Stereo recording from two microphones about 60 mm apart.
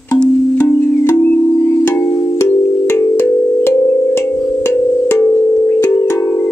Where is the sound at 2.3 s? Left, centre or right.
Left.